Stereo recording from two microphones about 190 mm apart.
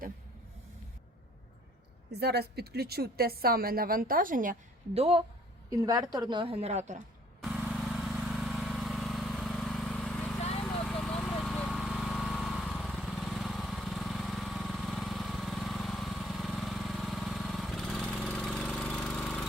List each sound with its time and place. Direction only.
2.0 s a woman's voice: 60° right (ahead or behind)
4.9 s a woman's voice: 30° right (ahead or behind)
5.7 s a woman's voice: 20° right (ahead or behind); by 7.0 s 35° right (ahead or behind)
7.4 s vehicle: 5° right (ahead or behind)
10.6 s a sound: 5° left (ahead or behind)